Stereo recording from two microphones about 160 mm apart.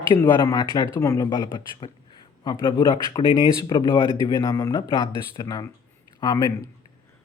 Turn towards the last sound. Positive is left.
turn(degrees=20)  # may be behind; listen again after turning